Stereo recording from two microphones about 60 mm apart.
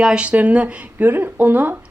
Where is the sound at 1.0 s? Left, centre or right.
Right.